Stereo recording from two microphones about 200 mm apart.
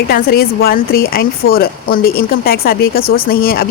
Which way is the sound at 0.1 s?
50° left (ahead or behind).